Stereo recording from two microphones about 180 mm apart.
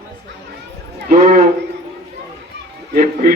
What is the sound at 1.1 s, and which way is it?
Speech, 40° right (ahead or behind).